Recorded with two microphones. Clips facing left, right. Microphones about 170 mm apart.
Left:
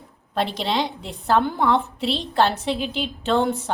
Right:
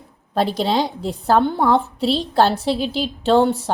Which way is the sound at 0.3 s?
40° right (ahead or behind).